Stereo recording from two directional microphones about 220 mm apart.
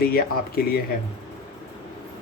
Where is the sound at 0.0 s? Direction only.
45° left (ahead or behind).